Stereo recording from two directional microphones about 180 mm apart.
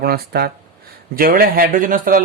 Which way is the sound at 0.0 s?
60° right (ahead or behind).